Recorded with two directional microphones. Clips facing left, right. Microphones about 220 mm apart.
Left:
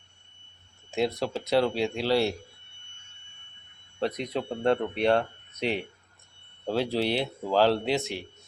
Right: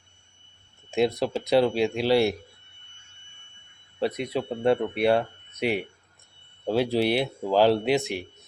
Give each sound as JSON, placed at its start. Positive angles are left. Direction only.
{"t": 0.9, "sound": "speech", "side_deg": -15}
{"t": 4.0, "sound": "speech", "side_deg": -5}